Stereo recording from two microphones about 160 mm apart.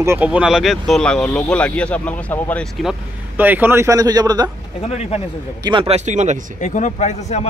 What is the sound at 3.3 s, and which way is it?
A man's voice, 10° right (ahead or behind).